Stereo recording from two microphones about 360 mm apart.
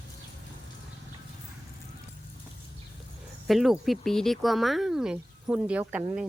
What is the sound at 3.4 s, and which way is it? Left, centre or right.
Speech, centre.